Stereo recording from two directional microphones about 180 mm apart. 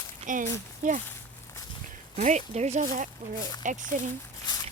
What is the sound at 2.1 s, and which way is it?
Speech, 40° right (ahead or behind).